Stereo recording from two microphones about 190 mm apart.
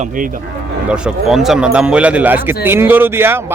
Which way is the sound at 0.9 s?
5° right (ahead or behind).